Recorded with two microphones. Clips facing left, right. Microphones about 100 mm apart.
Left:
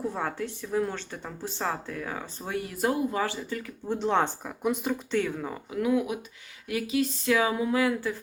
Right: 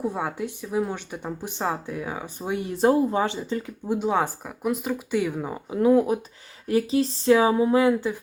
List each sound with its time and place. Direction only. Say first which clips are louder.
0.0 s a woman's voice: right 3 dB; 15° right (ahead or behind)
3.9 s a woman's voice: right 2 dB; 10° right (ahead or behind)
5.7 s speech: right 7 dB; 35° right (ahead or behind)